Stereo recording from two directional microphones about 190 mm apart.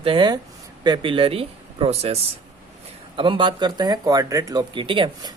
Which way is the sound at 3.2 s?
25° right (ahead or behind).